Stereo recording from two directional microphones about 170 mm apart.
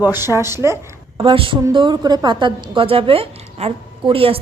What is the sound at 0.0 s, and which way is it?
A woman's voice, 15° right (ahead or behind).